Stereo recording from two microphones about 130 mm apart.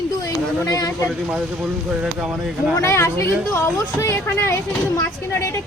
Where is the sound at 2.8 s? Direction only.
20° left (ahead or behind).